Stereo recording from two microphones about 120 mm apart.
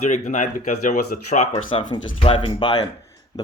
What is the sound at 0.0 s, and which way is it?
Speech, 80° left.